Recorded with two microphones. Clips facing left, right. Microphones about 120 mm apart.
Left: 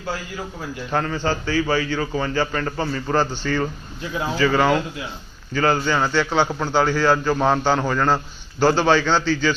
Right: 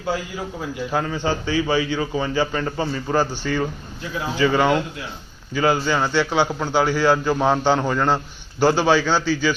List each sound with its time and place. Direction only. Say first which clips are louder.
0.9 s a man's voice: left 1 dB; 10° right (ahead or behind)